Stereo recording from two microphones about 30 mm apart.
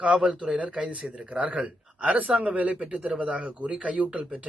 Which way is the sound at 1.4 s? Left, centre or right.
Right.